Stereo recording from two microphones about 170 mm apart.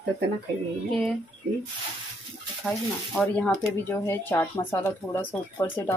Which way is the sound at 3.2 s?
5° left (ahead or behind).